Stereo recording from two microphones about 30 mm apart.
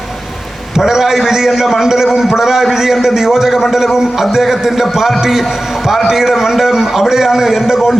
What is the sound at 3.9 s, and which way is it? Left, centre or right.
A man's voice, centre.